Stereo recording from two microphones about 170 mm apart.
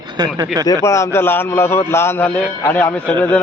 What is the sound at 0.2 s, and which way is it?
Speech, 25° right (ahead or behind).